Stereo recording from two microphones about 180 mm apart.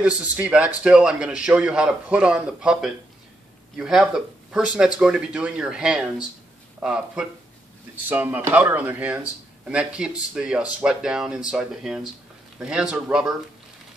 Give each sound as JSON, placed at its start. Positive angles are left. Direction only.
{"t": 0.0, "sound": "speech", "side_deg": -5}